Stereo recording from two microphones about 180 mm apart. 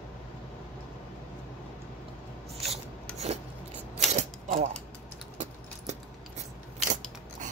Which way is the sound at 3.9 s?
40° right (ahead or behind).